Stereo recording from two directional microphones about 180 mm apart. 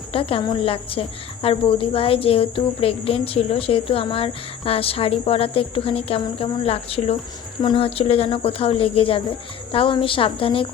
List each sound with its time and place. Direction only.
0.1 s a woman's voice: 30° left (ahead or behind)